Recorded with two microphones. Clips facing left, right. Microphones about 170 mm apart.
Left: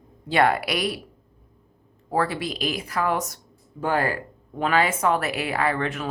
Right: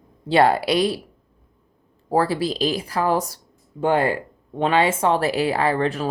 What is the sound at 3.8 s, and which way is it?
A woman's voice, 20° right (ahead or behind).